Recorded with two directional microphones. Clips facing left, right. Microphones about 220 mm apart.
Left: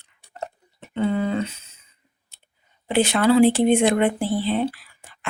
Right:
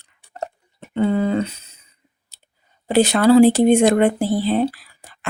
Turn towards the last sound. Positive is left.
turn(degrees=-40)  # may be behind; listen again after turning